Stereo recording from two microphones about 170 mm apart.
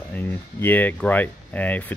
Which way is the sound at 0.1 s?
10° left (ahead or behind).